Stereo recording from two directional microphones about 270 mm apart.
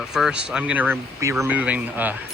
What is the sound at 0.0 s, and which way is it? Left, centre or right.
Speech, centre.